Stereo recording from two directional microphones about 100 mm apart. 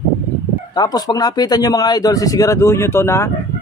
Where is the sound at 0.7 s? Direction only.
40° left (ahead or behind).